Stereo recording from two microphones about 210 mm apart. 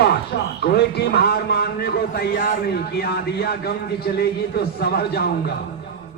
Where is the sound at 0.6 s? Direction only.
50° left (ahead or behind).